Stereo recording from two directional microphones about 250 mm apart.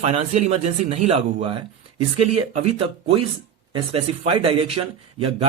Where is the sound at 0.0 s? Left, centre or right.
Right.